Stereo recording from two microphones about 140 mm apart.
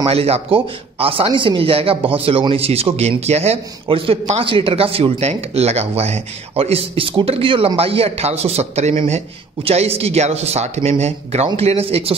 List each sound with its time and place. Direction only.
0.1 s speech: 45° right (ahead or behind)